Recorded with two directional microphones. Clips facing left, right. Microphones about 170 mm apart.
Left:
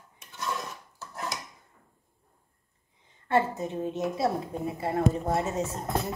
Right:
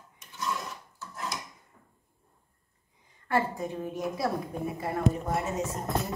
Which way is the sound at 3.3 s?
25° left (ahead or behind).